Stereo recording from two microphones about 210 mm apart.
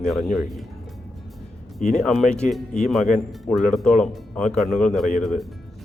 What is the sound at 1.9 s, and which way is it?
Speech, centre (ahead or behind).